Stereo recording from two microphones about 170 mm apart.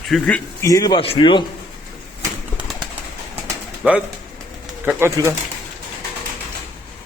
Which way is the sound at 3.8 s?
5° right (ahead or behind).